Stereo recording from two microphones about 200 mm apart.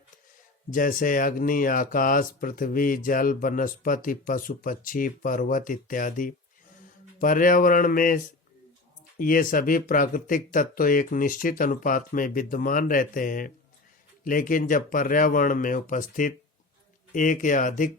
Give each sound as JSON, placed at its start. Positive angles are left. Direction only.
{"t": 0.7, "sound": "speech", "side_deg": 45}